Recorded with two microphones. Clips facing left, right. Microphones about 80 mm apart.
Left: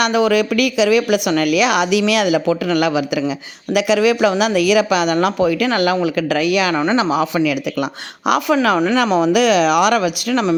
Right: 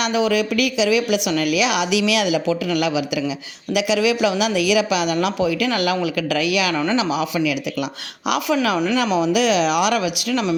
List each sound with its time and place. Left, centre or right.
0.0 s a woman's voice: left